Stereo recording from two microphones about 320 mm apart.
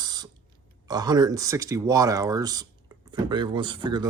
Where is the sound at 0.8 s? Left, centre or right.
Centre.